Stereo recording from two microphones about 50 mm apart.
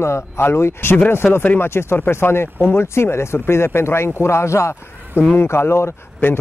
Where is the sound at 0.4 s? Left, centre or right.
Left.